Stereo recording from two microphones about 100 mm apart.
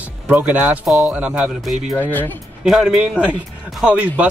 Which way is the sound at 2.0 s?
20° left (ahead or behind).